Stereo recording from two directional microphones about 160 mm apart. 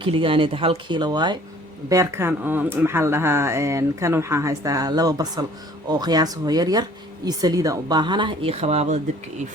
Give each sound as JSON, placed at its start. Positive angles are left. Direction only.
{"t": 0.0, "sound": "a woman's voice", "side_deg": -35}